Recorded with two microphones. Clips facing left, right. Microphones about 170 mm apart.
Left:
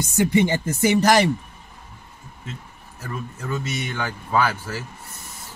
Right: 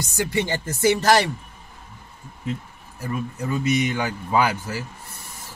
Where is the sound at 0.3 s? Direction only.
15° left (ahead or behind).